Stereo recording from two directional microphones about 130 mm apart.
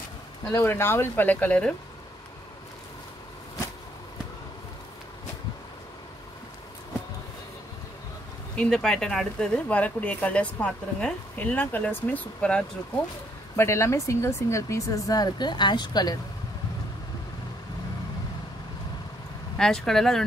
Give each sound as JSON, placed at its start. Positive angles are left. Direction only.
{"t": 0.5, "sound": "speech", "side_deg": 20}
{"t": 8.5, "sound": "speech", "side_deg": 5}
{"t": 13.6, "sound": "a woman's voice", "side_deg": 20}
{"t": 19.5, "sound": "speech", "side_deg": 5}